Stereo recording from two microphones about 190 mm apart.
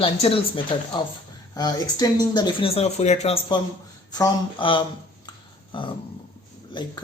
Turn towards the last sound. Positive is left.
turn(degrees=25)  # may be behind; listen again after turning